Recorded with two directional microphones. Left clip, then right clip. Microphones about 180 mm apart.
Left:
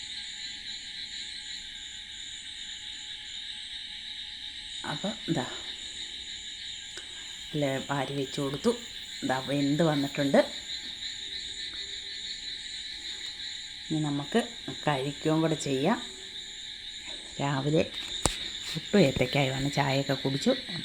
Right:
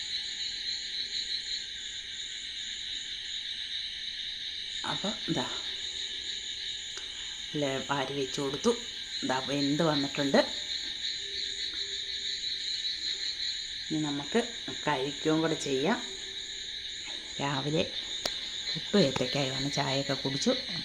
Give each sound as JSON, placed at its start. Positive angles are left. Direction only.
{"t": 4.9, "sound": "speech", "side_deg": 10}
{"t": 7.6, "sound": "speech", "side_deg": 10}
{"t": 14.3, "sound": "speech", "side_deg": 20}
{"t": 17.4, "sound": "speech", "side_deg": 15}
{"t": 18.9, "sound": "speech", "side_deg": 15}